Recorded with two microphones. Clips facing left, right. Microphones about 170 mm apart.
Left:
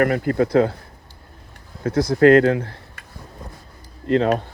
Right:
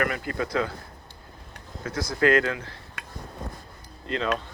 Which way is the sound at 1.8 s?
60° left (ahead or behind).